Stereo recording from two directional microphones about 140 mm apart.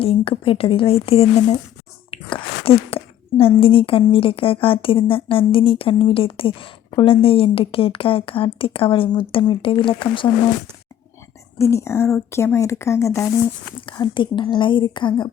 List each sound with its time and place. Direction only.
0.0 s speech: 40° left (ahead or behind)
2.0 s a sound: 40° left (ahead or behind)
3.6 s a woman's voice: 40° left (ahead or behind)
11.5 s speech: 20° left (ahead or behind)
13.8 s a woman's voice: 35° left (ahead or behind)